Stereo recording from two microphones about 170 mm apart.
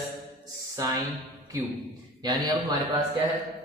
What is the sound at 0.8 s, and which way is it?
Speech, 20° right (ahead or behind).